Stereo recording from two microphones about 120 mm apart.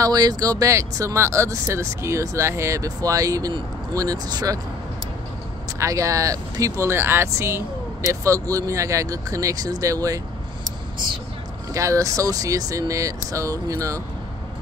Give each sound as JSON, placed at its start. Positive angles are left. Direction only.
{"t": 0.0, "sound": "speech", "side_deg": -35}
{"t": 5.8, "sound": "speech", "side_deg": -25}
{"t": 11.7, "sound": "speech", "side_deg": -25}